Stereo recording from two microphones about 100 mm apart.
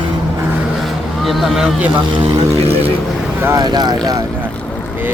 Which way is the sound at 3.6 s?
45° right (ahead or behind).